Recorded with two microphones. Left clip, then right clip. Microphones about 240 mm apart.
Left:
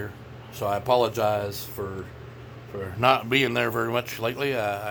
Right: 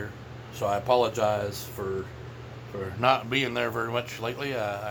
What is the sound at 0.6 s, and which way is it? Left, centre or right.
A man's voice, left.